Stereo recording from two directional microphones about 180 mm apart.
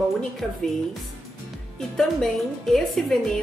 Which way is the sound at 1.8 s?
Centre (ahead or behind).